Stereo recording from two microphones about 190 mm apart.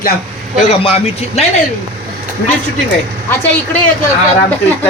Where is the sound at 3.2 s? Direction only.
10° left (ahead or behind).